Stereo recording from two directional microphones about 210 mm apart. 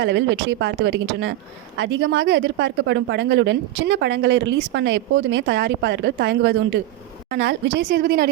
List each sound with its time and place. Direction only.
0.0 s a woman's voice: 55° right (ahead or behind)